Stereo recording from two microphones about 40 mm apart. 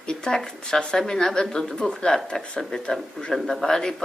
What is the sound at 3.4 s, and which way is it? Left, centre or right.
Speech, centre.